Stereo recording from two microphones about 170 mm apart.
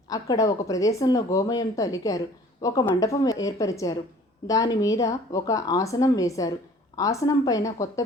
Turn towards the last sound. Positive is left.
turn(degrees=20)  # may be behind; listen again after turning